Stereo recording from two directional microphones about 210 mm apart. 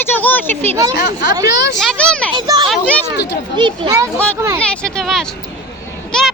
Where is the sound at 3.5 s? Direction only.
20° right (ahead or behind).